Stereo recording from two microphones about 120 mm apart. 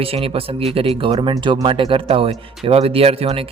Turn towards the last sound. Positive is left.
turn(degrees=-55)  # may be behind; listen again after turning